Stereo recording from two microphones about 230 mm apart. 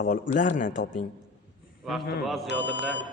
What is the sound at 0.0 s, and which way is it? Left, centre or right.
Speech, left.